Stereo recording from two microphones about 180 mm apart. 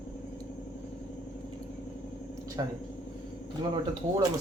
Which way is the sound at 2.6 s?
25° right (ahead or behind).